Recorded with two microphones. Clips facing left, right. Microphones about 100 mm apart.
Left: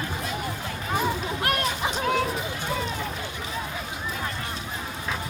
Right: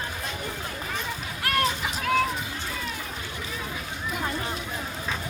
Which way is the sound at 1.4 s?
25° left (ahead or behind).